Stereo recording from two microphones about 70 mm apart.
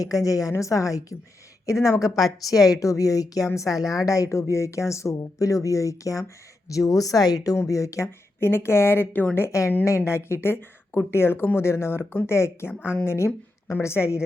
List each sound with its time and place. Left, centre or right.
0.0 s speech: left
2.5 s speech: left
7.6 s a woman's voice: left